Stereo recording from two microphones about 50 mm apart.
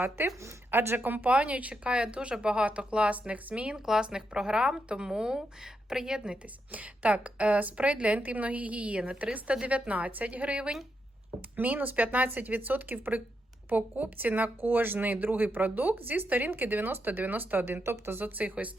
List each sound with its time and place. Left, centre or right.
0.7 s a woman's voice: right
3.8 s speech: centre
6.7 s a woman's voice: right
17.8 s speech: right
18.4 s a woman's voice: right